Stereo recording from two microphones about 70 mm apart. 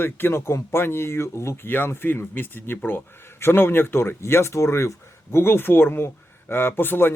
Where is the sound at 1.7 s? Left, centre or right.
Left.